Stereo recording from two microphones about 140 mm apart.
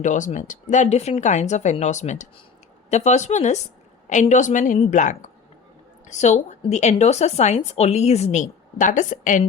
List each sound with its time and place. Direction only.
0.0 s speech: 60° left (ahead or behind)